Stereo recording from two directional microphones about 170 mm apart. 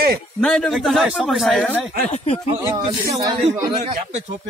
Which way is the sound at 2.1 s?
35° left (ahead or behind).